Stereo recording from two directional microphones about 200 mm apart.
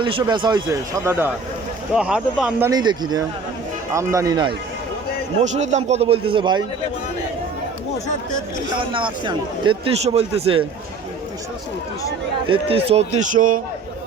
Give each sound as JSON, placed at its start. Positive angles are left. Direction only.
{"t": 0.0, "sound": "a man's voice", "side_deg": -25}
{"t": 2.6, "sound": "a man's voice", "side_deg": -20}
{"t": 5.4, "sound": "a man's voice", "side_deg": -35}
{"t": 8.9, "sound": "a man's voice", "side_deg": -25}
{"t": 12.5, "sound": "a man's voice", "side_deg": -30}